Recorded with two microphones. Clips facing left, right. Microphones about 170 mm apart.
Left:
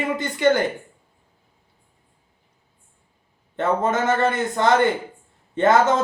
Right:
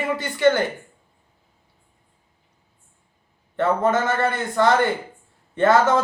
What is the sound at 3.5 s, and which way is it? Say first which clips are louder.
A man's voice: right 1 dB; 20° left (ahead or behind).